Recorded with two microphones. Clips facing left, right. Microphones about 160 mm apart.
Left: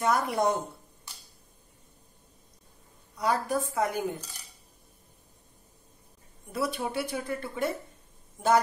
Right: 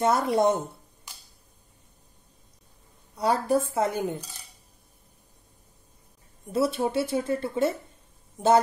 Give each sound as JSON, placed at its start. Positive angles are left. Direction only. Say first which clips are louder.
{"t": 0.0, "sound": "speech", "louder": "right 4 dB", "side_deg": -25}
{"t": 3.2, "sound": "speech", "louder": "right 4 dB", "side_deg": -30}
{"t": 6.5, "sound": "speech", "louder": "right 6 dB", "side_deg": -25}